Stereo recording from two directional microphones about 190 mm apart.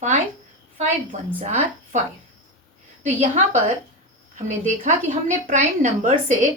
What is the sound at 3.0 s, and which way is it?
A woman's voice, 40° right (ahead or behind).